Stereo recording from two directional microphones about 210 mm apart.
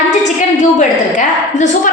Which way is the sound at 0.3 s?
35° left (ahead or behind).